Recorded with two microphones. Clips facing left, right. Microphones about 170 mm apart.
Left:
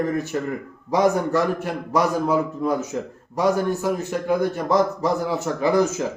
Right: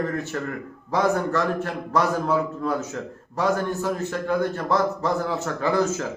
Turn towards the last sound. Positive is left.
turn(degrees=15)  # may be behind; listen again after turning